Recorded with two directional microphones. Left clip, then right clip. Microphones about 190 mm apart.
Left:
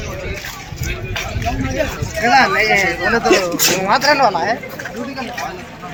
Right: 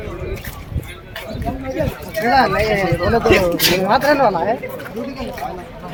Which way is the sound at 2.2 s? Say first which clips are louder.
Left 2 dB; 20° right (ahead or behind).